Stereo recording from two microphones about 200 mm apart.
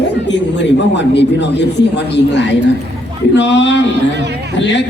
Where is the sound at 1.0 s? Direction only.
60° left (ahead or behind).